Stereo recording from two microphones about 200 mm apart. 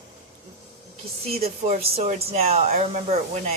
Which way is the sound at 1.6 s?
35° right (ahead or behind).